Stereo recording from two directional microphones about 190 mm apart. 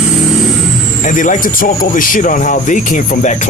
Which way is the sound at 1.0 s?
45° left (ahead or behind).